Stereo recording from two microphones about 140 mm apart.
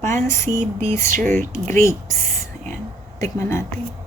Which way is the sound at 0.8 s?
20° left (ahead or behind).